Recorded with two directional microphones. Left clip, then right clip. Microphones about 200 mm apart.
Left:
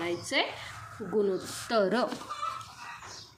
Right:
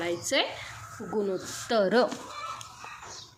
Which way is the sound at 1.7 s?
15° right (ahead or behind).